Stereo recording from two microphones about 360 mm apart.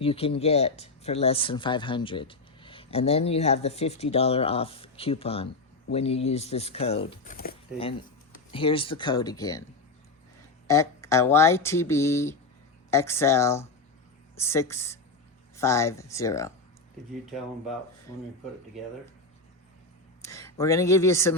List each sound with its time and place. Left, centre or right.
0.0 s speech: centre
10.7 s speech: centre
20.2 s speech: centre